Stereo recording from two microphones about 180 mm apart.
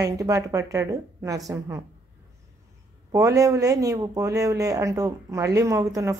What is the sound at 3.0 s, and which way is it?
Speech, 15° right (ahead or behind).